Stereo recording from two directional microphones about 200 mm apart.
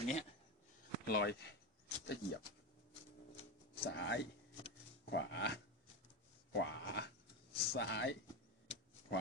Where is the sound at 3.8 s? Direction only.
65° left (ahead or behind).